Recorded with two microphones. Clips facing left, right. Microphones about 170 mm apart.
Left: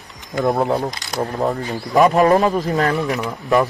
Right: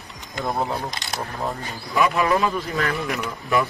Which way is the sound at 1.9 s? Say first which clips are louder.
Left 7 dB; 40° left (ahead or behind).